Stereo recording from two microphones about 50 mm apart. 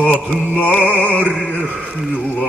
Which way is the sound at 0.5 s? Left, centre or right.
Left.